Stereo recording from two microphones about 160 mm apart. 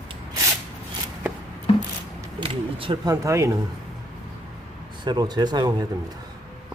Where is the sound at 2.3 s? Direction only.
30° right (ahead or behind).